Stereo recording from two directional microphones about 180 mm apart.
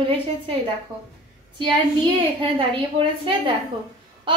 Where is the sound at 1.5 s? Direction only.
30° right (ahead or behind).